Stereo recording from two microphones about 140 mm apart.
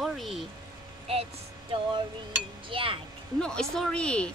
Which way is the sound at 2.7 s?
40° right (ahead or behind).